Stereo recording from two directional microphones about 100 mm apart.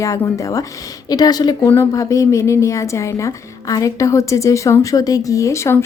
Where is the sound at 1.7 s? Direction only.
30° left (ahead or behind).